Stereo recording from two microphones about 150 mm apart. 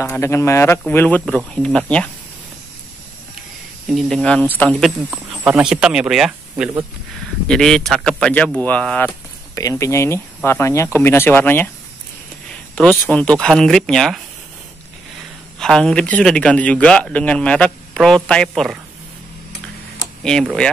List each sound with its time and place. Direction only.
0.0 s speech: 15° left (ahead or behind)
3.9 s speech: 5° left (ahead or behind)
5.3 s speech: 10° right (ahead or behind)
7.4 s speech: 5° left (ahead or behind)
9.6 s speech: 20° left (ahead or behind)
13.0 s speech: 10° left (ahead or behind)
15.6 s speech: 5° left (ahead or behind)
20.2 s speech: 5° left (ahead or behind)